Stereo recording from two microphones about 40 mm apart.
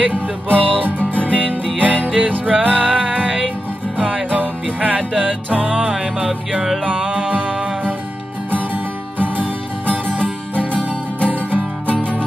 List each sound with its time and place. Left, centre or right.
0.0 s music: right
9.2 s music: right
11.3 s music: right